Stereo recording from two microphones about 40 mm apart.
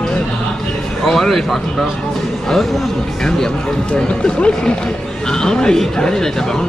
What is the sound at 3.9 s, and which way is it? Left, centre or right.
Speech, left.